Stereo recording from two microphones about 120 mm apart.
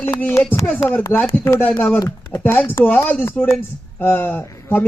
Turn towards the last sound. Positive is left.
turn(degrees=15)  # may be behind; listen again after turning